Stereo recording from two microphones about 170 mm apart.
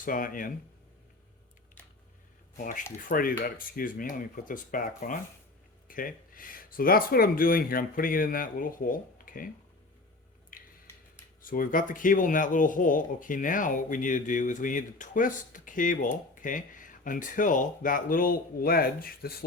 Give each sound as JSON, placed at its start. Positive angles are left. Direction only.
{"t": 0.0, "sound": "speech", "side_deg": 55}
{"t": 3.1, "sound": "speech", "side_deg": 55}
{"t": 10.5, "sound": "a sound", "side_deg": 55}
{"t": 11.4, "sound": "speech", "side_deg": 55}